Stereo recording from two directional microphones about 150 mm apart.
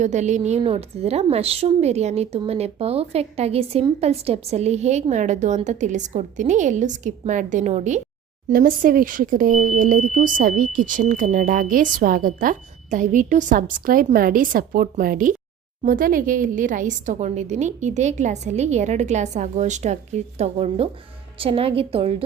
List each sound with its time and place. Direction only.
0.0 s a woman's voice: 50° right (ahead or behind)
8.4 s a woman's voice: 65° right (ahead or behind); by 22.2 s 40° right (ahead or behind)